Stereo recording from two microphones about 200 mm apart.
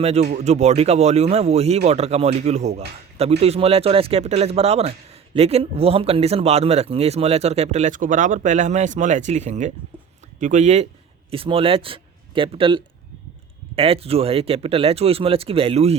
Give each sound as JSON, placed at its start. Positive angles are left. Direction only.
{"t": 0.0, "sound": "speech", "side_deg": -30}